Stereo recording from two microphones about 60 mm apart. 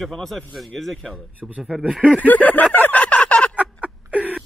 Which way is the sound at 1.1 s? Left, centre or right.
Right.